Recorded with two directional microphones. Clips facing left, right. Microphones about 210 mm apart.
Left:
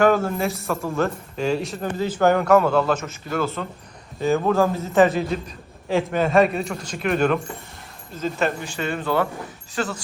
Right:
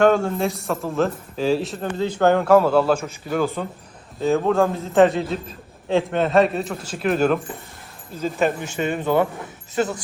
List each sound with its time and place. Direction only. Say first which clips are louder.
0.0 s a man's voice: right 1 dB; centre (ahead or behind); by 3.7 s 15° right (ahead or behind)
4.2 s a man's voice: right 1 dB; centre (ahead or behind); by 10.0 s 20° right (ahead or behind)